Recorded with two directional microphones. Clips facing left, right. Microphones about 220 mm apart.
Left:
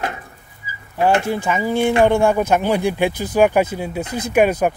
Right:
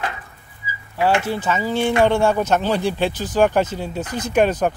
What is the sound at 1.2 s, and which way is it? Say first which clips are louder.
Speech: left 2 dB; 15° left (ahead or behind).